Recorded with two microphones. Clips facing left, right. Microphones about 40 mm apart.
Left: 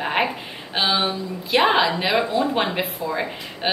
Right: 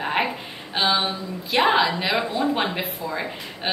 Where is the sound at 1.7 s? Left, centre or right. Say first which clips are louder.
Left 1 dB; centre.